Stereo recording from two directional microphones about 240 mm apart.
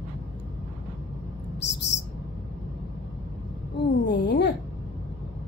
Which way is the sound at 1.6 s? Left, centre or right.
Left.